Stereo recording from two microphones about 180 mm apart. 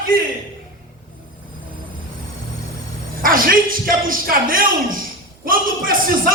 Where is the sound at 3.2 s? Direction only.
50° right (ahead or behind).